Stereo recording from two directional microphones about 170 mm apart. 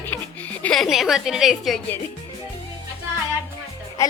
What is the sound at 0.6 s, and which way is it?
A woman's voice, centre (ahead or behind).